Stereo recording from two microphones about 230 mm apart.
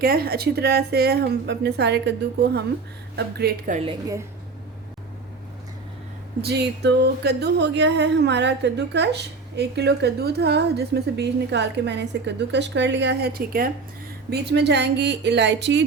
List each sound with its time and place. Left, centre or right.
0.0 s speech: right
6.4 s speech: right